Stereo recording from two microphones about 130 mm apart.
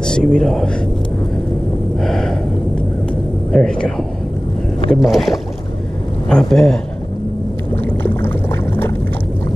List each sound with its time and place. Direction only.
0.0 s speech: 5° left (ahead or behind)
2.0 s gasp: 5° left (ahead or behind)
3.5 s a man's voice: 5° left (ahead or behind)
5.0 s a man's voice: centre (ahead or behind)
7.7 s a sound: 15° left (ahead or behind)